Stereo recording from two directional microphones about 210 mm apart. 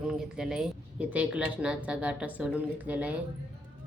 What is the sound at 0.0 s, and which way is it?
Speech, 5° right (ahead or behind).